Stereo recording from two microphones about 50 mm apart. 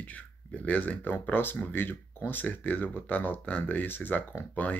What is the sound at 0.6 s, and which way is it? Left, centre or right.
Speech, left.